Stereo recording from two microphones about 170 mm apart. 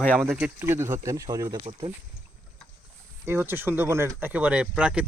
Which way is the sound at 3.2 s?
10° right (ahead or behind).